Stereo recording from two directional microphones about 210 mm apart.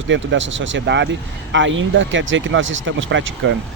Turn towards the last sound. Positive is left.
turn(degrees=-60)  # may be behind; listen again after turning